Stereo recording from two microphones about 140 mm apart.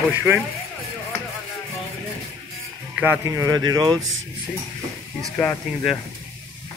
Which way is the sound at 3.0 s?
15° right (ahead or behind).